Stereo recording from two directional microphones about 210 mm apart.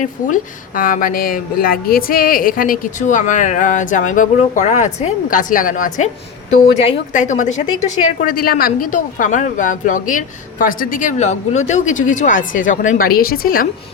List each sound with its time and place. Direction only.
0.8 s a woman's voice: 40° left (ahead or behind)